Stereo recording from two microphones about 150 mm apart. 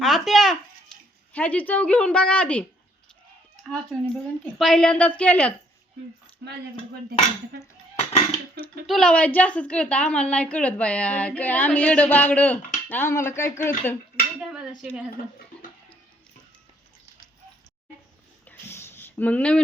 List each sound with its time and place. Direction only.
0.0 s a woman's voice: centre (ahead or behind)
0.9 s a sound: 5° left (ahead or behind)
1.3 s a woman's voice: 10° left (ahead or behind)
6.4 s speech: 90° right
8.9 s a woman's voice: 5° left (ahead or behind)
14.3 s a woman's voice: 5° right (ahead or behind)
18.4 s a sound: 15° left (ahead or behind)